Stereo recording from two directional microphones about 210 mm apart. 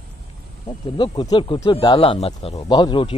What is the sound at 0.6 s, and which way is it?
Speech, 20° left (ahead or behind).